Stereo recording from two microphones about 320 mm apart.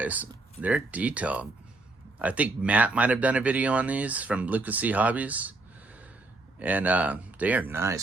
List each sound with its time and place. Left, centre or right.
0.0 s speech: centre